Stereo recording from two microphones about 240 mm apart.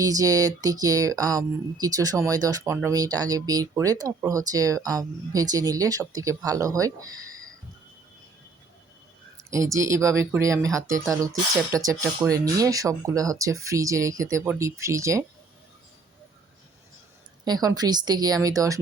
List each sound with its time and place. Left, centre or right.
0.0 s speech: centre
9.4 s speech: centre
17.4 s speech: centre